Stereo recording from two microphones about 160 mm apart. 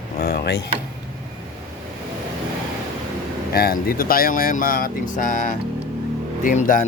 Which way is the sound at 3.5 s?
70° left (ahead or behind).